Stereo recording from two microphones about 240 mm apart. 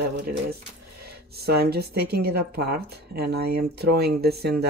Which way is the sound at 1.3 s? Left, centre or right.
Right.